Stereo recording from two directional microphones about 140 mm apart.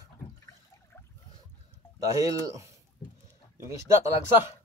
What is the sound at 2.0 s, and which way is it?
Speech, 25° right (ahead or behind).